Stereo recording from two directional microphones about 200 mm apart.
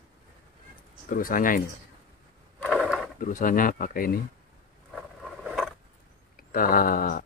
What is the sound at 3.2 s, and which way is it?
Speech, 40° left (ahead or behind).